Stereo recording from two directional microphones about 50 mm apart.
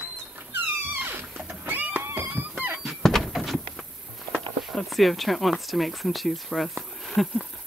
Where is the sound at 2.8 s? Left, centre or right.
Centre.